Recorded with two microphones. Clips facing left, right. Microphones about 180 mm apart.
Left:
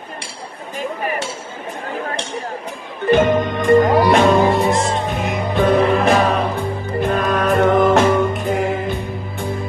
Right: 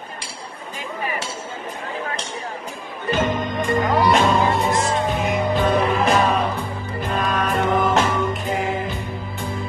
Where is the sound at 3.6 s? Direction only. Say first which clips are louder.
Left 7 dB; 50° left (ahead or behind).